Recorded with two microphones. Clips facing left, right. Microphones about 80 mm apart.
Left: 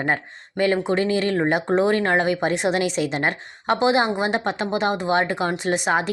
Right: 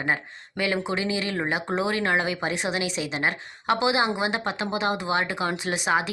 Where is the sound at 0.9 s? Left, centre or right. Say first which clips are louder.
Left 6 dB; left.